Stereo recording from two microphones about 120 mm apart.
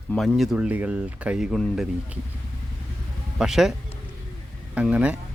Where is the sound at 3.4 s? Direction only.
5° right (ahead or behind).